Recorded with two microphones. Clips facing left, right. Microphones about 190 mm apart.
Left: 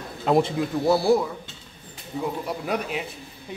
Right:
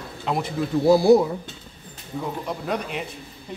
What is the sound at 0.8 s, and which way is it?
Speech, 20° right (ahead or behind).